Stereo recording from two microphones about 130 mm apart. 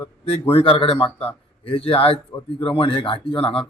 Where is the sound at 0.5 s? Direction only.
45° left (ahead or behind).